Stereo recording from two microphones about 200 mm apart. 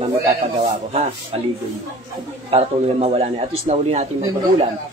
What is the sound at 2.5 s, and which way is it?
Speech, 30° right (ahead or behind).